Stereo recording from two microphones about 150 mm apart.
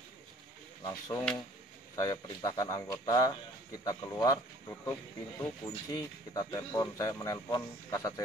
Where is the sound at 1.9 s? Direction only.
25° left (ahead or behind).